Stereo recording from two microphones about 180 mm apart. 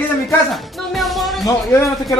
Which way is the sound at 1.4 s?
15° left (ahead or behind).